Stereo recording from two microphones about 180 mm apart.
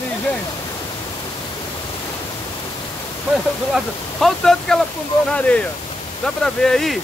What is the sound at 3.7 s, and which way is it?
Speech, centre (ahead or behind).